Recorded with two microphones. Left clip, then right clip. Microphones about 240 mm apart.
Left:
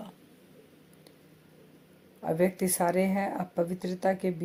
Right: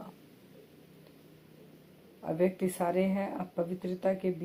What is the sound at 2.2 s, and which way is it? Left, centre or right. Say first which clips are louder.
Speech: left 3 dB; left.